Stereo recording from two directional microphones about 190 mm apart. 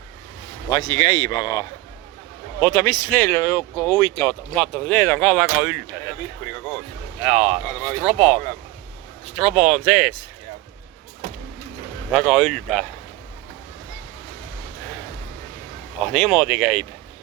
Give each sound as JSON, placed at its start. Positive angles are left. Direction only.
{"t": 0.7, "sound": "speech", "side_deg": 25}
{"t": 7.2, "sound": "speech", "side_deg": -5}
{"t": 12.1, "sound": "speech", "side_deg": 0}
{"t": 16.0, "sound": "speech", "side_deg": 5}